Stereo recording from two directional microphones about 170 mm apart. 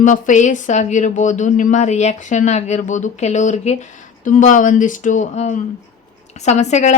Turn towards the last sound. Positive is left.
turn(degrees=40)  # may be behind; listen again after turning